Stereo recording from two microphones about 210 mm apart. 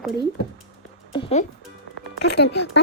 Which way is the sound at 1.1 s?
25° left (ahead or behind).